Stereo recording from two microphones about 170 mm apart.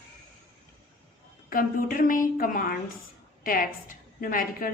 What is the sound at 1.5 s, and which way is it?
A woman's voice, 55° left (ahead or behind).